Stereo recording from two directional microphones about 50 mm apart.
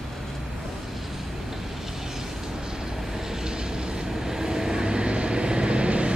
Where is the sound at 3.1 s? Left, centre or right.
Centre.